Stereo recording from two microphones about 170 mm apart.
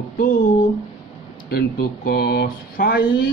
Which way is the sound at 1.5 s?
65° left (ahead or behind).